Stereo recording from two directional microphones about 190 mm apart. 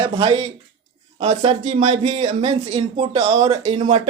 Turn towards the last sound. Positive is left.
turn(degrees=-35)  # may be behind; listen again after turning